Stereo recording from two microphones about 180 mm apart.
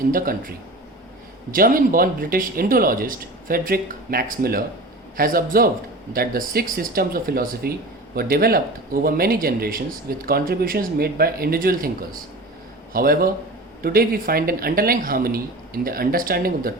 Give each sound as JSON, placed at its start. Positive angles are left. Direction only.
{"t": 0.1, "sound": "speech", "side_deg": -50}